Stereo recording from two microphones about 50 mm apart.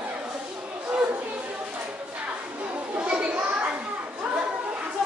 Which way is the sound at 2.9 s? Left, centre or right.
Right.